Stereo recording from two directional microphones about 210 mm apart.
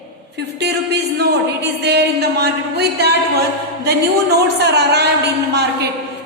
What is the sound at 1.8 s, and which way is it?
Music, 50° right (ahead or behind).